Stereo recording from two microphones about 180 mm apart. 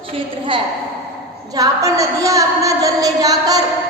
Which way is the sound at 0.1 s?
30° right (ahead or behind).